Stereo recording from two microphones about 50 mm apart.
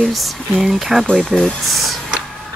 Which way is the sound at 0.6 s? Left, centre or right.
Centre.